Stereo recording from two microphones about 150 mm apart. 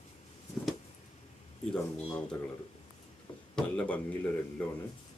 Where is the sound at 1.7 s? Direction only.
5° left (ahead or behind).